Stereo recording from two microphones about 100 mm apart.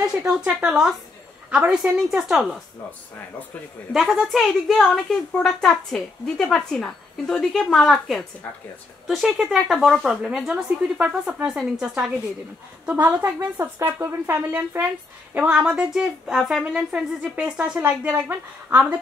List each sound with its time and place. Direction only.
0.0 s a woman's voice: 10° right (ahead or behind)
3.9 s a woman's voice: centre (ahead or behind)
11.4 s speech: 5° right (ahead or behind)
12.8 s a woman's voice: 15° right (ahead or behind)
15.3 s a woman's voice: 10° right (ahead or behind)